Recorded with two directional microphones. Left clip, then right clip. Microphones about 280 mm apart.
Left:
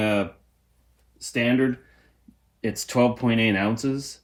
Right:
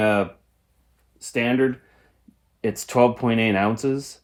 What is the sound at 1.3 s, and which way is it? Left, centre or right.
Speech, centre.